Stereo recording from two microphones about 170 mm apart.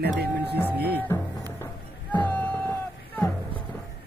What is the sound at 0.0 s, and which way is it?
Music, 70° right (ahead or behind).